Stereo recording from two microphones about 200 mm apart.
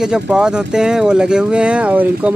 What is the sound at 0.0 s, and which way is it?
Speech, 5° right (ahead or behind).